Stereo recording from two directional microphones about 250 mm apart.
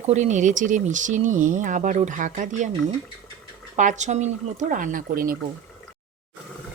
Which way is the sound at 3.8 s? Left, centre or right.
Right.